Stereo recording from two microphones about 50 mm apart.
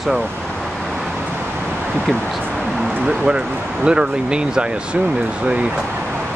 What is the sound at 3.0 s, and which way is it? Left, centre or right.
Speech, centre.